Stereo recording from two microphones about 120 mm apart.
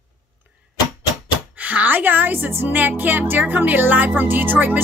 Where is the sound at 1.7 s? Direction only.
15° right (ahead or behind).